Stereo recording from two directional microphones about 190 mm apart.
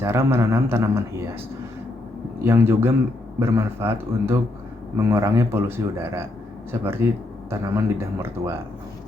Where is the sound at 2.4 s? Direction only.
15° right (ahead or behind).